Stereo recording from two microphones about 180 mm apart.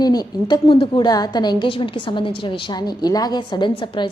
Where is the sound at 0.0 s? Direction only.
20° left (ahead or behind).